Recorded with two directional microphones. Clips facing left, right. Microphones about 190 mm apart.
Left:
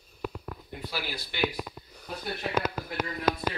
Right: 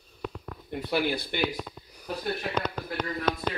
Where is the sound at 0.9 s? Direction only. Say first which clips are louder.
Right 11 dB; 55° right (ahead or behind).